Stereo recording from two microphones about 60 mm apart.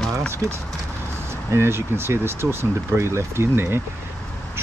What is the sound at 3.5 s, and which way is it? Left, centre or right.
Speech, right.